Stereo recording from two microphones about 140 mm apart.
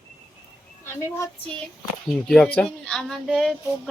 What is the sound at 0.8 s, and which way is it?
Speech, 20° left (ahead or behind).